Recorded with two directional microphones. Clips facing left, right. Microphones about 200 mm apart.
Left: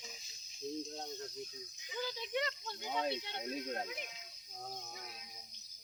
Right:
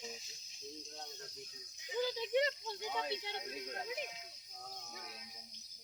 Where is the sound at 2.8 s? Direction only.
35° left (ahead or behind).